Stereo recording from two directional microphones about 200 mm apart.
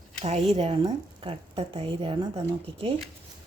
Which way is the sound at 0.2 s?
30° right (ahead or behind).